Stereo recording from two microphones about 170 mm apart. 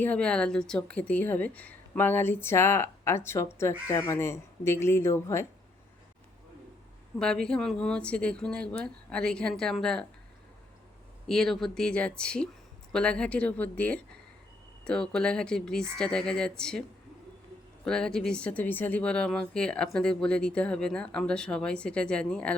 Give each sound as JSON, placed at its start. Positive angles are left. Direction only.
{"t": 0.0, "sound": "a woman's voice", "side_deg": 5}
{"t": 7.2, "sound": "speech", "side_deg": 5}
{"t": 11.3, "sound": "a woman's voice", "side_deg": 0}
{"t": 17.8, "sound": "speech", "side_deg": 5}